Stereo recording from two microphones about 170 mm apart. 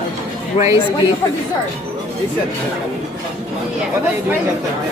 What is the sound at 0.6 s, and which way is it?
Speech, 40° left (ahead or behind).